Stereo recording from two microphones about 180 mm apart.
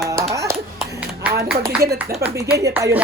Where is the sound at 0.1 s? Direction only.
15° right (ahead or behind).